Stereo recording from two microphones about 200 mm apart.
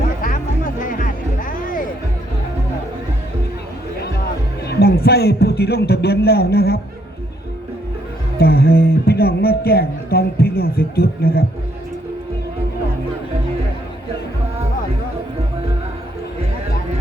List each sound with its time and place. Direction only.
0.2 s music: 45° left (ahead or behind)
4.6 s speech: 50° left (ahead or behind)
8.4 s speech: 50° left (ahead or behind)